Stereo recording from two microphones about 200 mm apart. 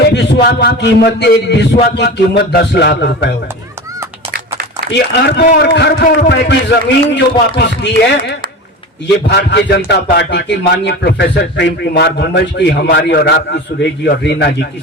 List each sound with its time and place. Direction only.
0.1 s a man's voice: 55° left (ahead or behind)
4.9 s speech: 55° left (ahead or behind)
9.2 s speech: 60° left (ahead or behind)